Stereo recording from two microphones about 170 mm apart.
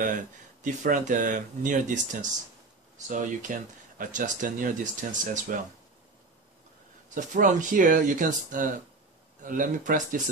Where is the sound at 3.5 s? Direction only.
50° right (ahead or behind).